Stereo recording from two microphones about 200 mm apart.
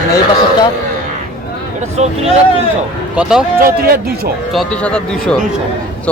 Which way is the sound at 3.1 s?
5° right (ahead or behind).